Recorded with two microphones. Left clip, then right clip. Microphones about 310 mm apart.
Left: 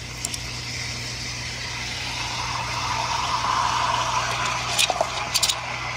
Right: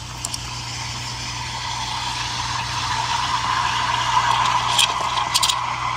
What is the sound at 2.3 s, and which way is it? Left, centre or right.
Vehicle, centre.